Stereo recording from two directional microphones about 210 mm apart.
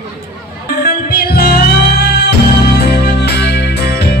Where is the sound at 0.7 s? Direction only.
45° left (ahead or behind).